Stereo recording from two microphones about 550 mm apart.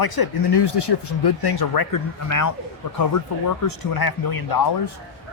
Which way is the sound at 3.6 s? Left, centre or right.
Left.